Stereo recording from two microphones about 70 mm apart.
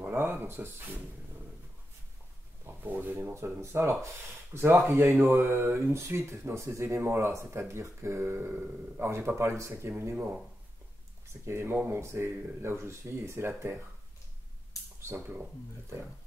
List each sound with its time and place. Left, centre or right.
0.1 s speech: right
2.6 s speech: right
11.4 s speech: right